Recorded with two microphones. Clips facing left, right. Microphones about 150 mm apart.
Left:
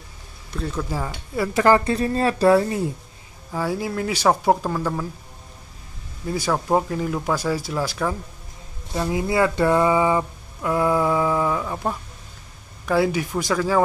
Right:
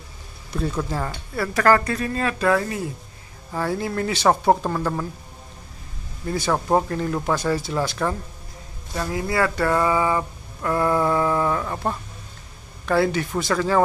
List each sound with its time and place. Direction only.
0.8 s speech: 5° left (ahead or behind)
1.3 s speech: 20° left (ahead or behind)
2.0 s speech: 30° left (ahead or behind)
3.5 s speech: 5° left (ahead or behind)
6.2 s speech: 5° left (ahead or behind)
8.9 s speech: 15° left (ahead or behind)